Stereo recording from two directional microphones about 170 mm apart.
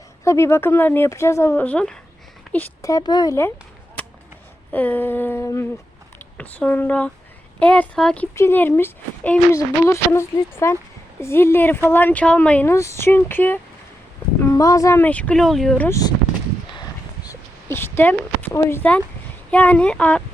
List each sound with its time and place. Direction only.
0.3 s speech: 15° left (ahead or behind)
2.8 s speech: 25° left (ahead or behind)
4.7 s speech: 10° left (ahead or behind)
17.2 s a sound: 15° left (ahead or behind)
19.5 s speech: 10° left (ahead or behind)